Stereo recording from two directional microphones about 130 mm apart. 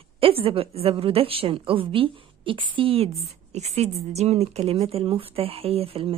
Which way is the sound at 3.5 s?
55° right (ahead or behind).